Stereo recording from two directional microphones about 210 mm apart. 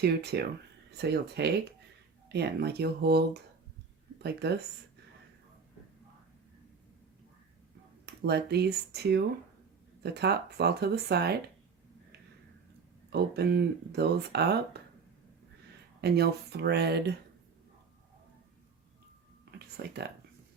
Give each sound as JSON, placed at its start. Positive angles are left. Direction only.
{"t": 0.0, "sound": "speech", "side_deg": -50}
{"t": 8.0, "sound": "speech", "side_deg": -50}
{"t": 13.1, "sound": "speech", "side_deg": -50}
{"t": 16.0, "sound": "speech", "side_deg": -50}
{"t": 19.5, "sound": "a sound", "side_deg": -50}